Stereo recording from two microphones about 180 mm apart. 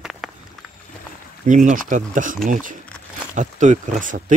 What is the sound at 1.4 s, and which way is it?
Speech, 45° right (ahead or behind).